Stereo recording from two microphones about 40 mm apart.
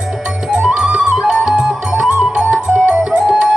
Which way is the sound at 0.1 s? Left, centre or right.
Centre.